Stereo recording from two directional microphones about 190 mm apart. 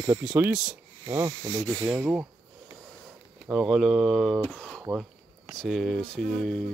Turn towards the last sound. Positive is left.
turn(degrees=5)  # may be behind; listen again after turning